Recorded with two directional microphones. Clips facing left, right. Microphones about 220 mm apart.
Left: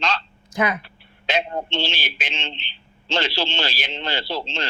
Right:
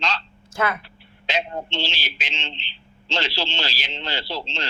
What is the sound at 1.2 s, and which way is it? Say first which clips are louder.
Speech: left 3 dB; 50° left (ahead or behind).